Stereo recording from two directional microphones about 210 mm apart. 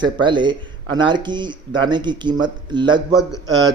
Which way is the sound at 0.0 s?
20° right (ahead or behind).